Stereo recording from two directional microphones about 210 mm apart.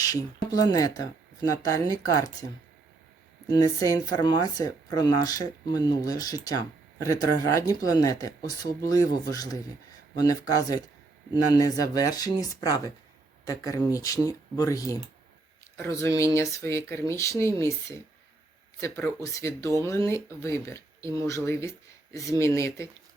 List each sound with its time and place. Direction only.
0.1 s speech: 20° left (ahead or behind)
3.5 s speech: 15° left (ahead or behind)